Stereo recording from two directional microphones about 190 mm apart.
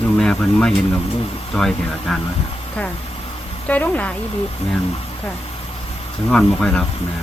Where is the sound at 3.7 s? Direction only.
10° left (ahead or behind).